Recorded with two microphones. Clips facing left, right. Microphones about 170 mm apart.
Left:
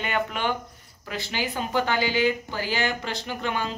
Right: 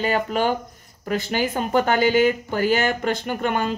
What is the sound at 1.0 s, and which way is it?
Speech, 50° right (ahead or behind).